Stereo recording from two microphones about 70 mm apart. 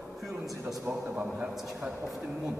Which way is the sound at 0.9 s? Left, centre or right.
Centre.